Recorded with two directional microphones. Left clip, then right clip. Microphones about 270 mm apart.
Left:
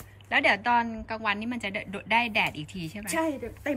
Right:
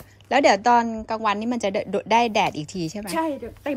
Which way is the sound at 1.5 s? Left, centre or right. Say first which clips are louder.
Right 8 dB; right.